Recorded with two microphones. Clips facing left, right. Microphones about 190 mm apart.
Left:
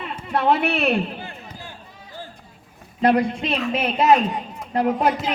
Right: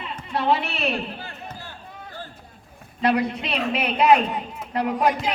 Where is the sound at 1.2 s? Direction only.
15° left (ahead or behind).